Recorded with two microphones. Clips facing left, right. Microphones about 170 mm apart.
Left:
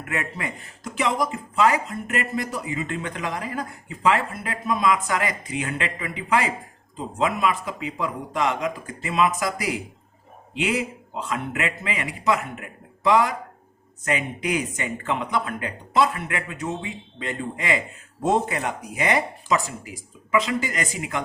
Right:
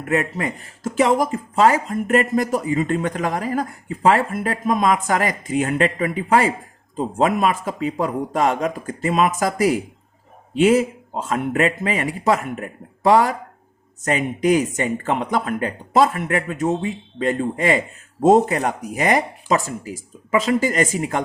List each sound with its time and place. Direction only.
0.0 s speech: 35° right (ahead or behind)